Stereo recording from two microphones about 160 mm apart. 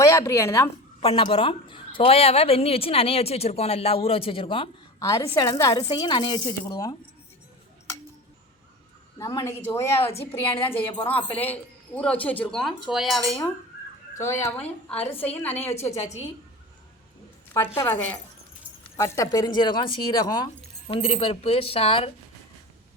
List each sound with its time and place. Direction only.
0.0 s a woman's voice: 15° left (ahead or behind)
1.0 s a woman's voice: 35° left (ahead or behind)
4.9 s speech: 20° left (ahead or behind)
9.1 s speech: 20° left (ahead or behind)
10.5 s a woman's voice: 35° left (ahead or behind)
11.1 s speech: 10° left (ahead or behind)
14.2 s speech: 20° left (ahead or behind)
14.9 s a woman's voice: 40° left (ahead or behind)
15.4 s speech: 10° left (ahead or behind)
17.7 s speech: 10° left (ahead or behind)
20.8 s a woman's voice: 40° left (ahead or behind)